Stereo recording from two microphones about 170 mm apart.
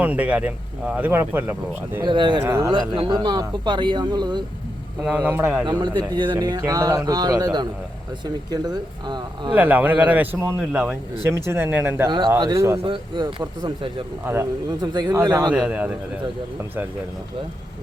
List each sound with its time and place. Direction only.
0.0 s speech: 10° right (ahead or behind)
2.0 s speech: 30° right (ahead or behind)
2.4 s speech: 15° right (ahead or behind)
2.9 s speech: 30° right (ahead or behind)
5.0 s speech: 10° right (ahead or behind)
5.6 s speech: 25° right (ahead or behind)
9.5 s speech: 10° right (ahead or behind); by 13.9 s 25° right (ahead or behind)
14.3 s speech: 15° right (ahead or behind)
15.5 s speech: 10° right (ahead or behind)